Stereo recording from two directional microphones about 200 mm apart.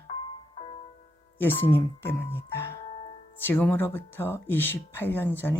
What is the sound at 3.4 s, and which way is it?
Speech, 10° left (ahead or behind).